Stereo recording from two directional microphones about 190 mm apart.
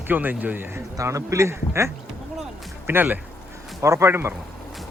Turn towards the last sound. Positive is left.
turn(degrees=-15)  # may be behind; listen again after turning